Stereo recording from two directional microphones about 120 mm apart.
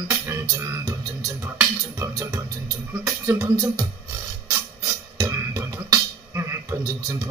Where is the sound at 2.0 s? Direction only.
30° right (ahead or behind).